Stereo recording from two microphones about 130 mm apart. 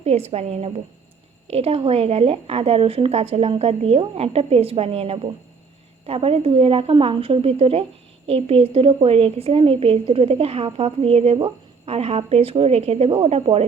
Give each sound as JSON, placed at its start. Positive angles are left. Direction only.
{"t": 0.0, "sound": "speech", "side_deg": -55}